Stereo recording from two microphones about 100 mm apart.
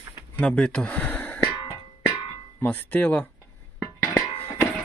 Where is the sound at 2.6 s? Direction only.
15° left (ahead or behind).